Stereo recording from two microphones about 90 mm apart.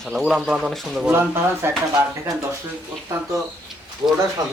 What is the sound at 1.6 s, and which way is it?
Speech, 25° right (ahead or behind).